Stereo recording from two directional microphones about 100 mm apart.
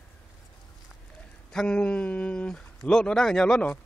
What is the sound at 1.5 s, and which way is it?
Speech, 10° left (ahead or behind).